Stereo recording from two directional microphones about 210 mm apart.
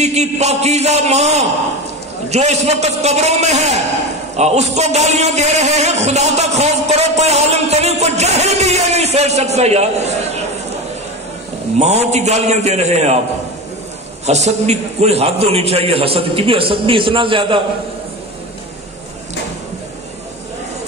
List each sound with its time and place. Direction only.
0.0 s a man's voice: 30° right (ahead or behind)
11.8 s a man's voice: 30° right (ahead or behind)
14.2 s a man's voice: 30° right (ahead or behind)